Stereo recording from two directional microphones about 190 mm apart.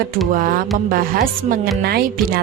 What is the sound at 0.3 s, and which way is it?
A woman's voice, 45° right (ahead or behind).